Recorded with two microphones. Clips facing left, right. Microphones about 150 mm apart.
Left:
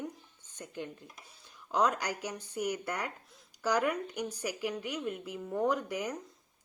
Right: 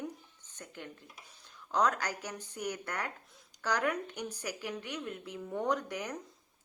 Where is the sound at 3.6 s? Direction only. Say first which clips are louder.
Left 2 dB; 10° left (ahead or behind).